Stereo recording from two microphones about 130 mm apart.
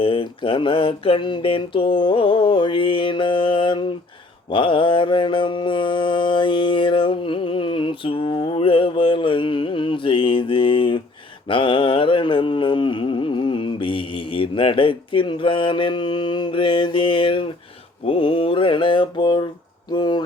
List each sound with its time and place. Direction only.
0.0 s mantra: 45° left (ahead or behind)